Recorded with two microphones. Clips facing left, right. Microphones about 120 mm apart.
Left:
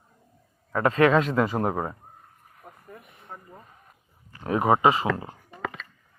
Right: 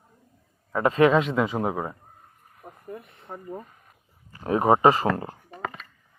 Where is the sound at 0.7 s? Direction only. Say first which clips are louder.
Right 1 dB; 25° right (ahead or behind).